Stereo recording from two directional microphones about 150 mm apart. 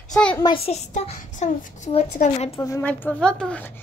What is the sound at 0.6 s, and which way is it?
A child's voice, 45° left (ahead or behind).